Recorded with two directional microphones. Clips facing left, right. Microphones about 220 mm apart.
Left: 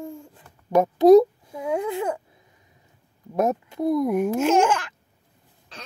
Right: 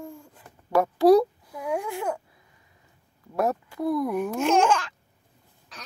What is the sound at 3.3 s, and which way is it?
Speech, 20° left (ahead or behind).